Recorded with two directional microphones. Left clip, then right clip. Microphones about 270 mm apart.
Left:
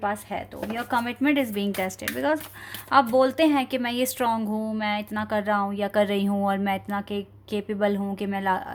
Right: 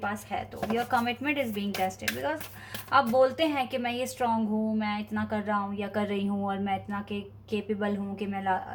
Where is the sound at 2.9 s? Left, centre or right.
Left.